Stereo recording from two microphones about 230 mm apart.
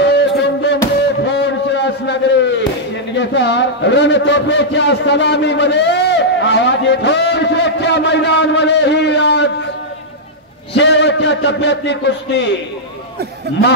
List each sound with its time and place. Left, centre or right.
0.0 s music: left
1.2 s a sound: left
3.2 s a man's voice: left
10.7 s a man's voice: left